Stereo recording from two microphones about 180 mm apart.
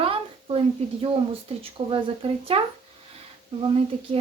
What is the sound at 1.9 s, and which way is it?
Speech, 30° right (ahead or behind).